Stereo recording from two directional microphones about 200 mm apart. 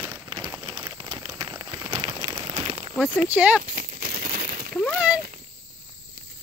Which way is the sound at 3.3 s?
5° right (ahead or behind).